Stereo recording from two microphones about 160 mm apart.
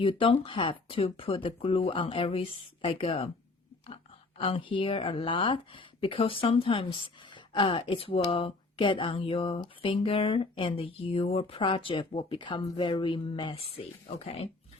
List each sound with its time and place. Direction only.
0.0 s speech: 35° left (ahead or behind)
4.4 s speech: 35° left (ahead or behind)